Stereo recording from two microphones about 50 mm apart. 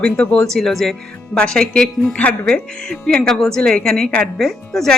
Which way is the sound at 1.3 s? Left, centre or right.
Centre.